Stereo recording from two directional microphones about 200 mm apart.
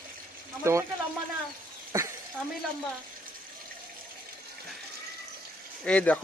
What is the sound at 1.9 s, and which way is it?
Speech, 15° right (ahead or behind).